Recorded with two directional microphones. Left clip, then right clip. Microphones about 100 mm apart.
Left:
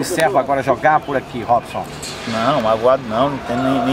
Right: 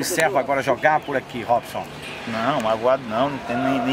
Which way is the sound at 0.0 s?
15° right (ahead or behind).